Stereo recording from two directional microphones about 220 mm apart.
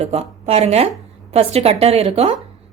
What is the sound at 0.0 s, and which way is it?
A woman's voice, 30° right (ahead or behind).